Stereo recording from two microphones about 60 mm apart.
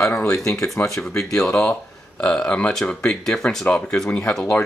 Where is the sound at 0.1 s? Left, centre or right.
Left.